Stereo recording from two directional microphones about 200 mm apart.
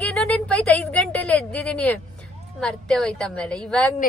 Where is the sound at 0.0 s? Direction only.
5° left (ahead or behind).